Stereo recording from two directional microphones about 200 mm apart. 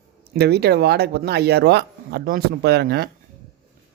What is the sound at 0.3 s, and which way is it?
Speech, 55° right (ahead or behind).